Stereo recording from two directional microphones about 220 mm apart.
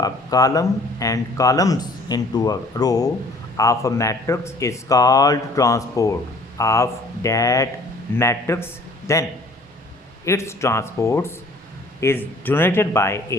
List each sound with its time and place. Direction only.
0.0 s a man's voice: 15° left (ahead or behind)
10.2 s speech: 15° left (ahead or behind)